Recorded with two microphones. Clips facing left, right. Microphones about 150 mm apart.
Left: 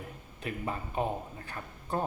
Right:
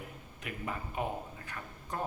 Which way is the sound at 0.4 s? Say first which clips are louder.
Left 4 dB; 30° left (ahead or behind).